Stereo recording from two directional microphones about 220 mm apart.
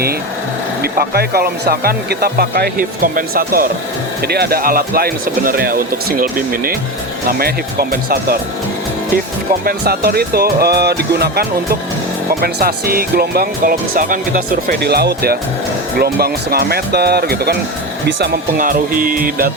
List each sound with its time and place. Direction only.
0.8 s speech: 45° right (ahead or behind)
9.6 s speech: 45° right (ahead or behind)